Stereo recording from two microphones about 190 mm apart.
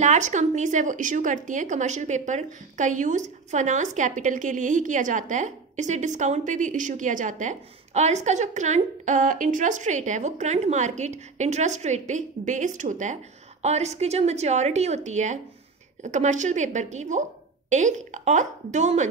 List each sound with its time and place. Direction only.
0.0 s a woman's voice: 40° right (ahead or behind)